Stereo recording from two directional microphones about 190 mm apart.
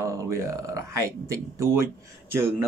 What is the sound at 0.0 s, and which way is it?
Speech, 15° right (ahead or behind).